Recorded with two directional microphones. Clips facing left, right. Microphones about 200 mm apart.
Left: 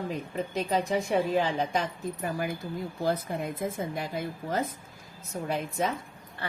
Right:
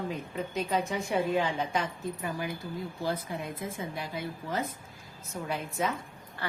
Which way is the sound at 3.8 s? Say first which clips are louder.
Left 4 dB; 45° left (ahead or behind).